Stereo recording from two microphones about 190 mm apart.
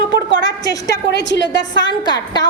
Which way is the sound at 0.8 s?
60° left (ahead or behind).